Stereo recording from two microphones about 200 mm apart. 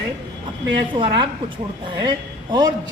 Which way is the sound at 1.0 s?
25° right (ahead or behind).